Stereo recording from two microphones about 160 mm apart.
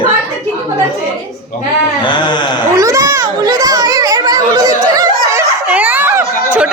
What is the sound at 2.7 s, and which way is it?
Children playing, 20° right (ahead or behind).